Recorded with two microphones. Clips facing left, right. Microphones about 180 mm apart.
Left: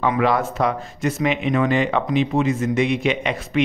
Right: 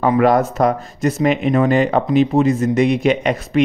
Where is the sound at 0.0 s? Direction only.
45° right (ahead or behind).